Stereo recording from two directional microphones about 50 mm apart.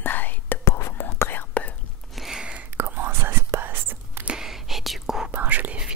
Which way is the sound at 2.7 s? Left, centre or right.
Right.